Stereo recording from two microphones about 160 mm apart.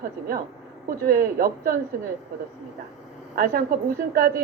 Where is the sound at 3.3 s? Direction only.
60° right (ahead or behind).